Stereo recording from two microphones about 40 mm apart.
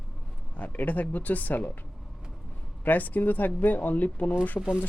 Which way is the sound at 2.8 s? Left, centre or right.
Left.